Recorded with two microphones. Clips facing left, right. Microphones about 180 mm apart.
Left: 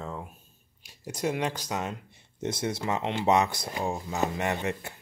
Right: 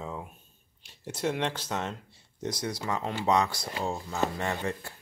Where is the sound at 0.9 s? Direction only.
10° left (ahead or behind).